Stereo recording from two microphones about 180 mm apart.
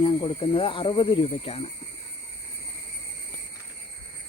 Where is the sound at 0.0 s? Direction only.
30° left (ahead or behind).